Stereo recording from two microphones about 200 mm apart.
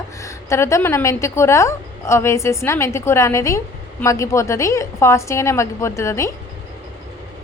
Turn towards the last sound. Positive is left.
turn(degrees=15)  # may be behind; listen again after turning